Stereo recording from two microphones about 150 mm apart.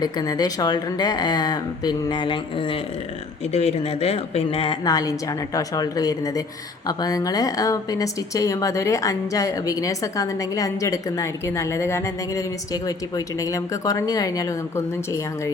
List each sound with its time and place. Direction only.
0.0 s speech: 25° left (ahead or behind)
3.5 s speech: 45° left (ahead or behind)
4.9 s speech: 25° left (ahead or behind)